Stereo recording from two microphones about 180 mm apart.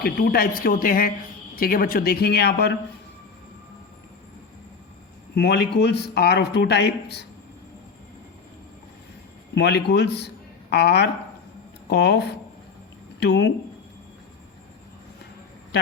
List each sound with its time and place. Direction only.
0.0 s a woman's voice: 60° left (ahead or behind)
5.3 s speech: 70° left (ahead or behind)
9.6 s a man's voice: 65° left (ahead or behind)
13.2 s speech: 70° left (ahead or behind)